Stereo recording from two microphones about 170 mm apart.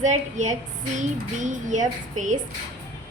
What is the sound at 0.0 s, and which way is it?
Speech, 45° right (ahead or behind).